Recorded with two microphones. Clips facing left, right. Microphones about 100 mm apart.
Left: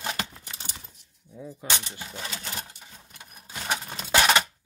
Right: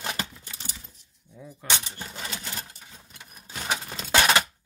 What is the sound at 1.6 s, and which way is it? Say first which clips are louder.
Speech: right 1 dB; 15° left (ahead or behind).